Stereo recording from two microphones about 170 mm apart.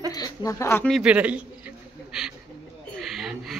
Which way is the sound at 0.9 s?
5° right (ahead or behind).